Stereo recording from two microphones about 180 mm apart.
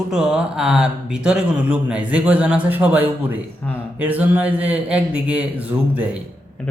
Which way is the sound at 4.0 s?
10° right (ahead or behind).